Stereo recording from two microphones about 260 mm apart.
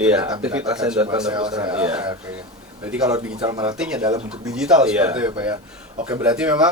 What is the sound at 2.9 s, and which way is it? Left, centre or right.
A man's voice, centre.